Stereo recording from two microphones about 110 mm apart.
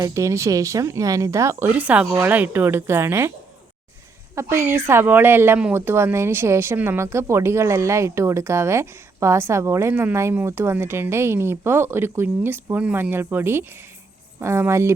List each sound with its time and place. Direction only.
0.0 s speech: 30° right (ahead or behind)
4.4 s speech: 20° right (ahead or behind)